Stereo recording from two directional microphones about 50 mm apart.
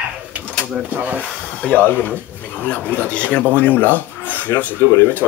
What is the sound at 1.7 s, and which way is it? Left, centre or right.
Speech, left.